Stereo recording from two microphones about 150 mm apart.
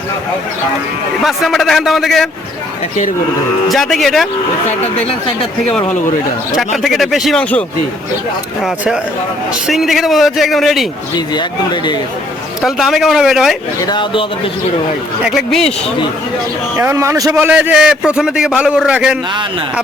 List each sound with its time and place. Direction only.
1.2 s a man's voice: centre (ahead or behind)
3.7 s a man's voice: centre (ahead or behind)
6.8 s a man's voice: centre (ahead or behind)
8.6 s a man's voice: 5° right (ahead or behind)
11.3 s speech: 30° left (ahead or behind)
12.6 s a man's voice: centre (ahead or behind)
13.8 s speech: 30° left (ahead or behind)
15.2 s a man's voice: centre (ahead or behind)
16.7 s a man's voice: 15° right (ahead or behind)